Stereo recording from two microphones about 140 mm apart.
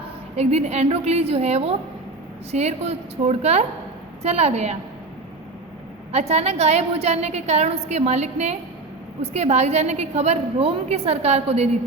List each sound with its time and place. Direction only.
0.3 s a woman's voice: 50° right (ahead or behind)
6.1 s a woman's voice: 50° right (ahead or behind)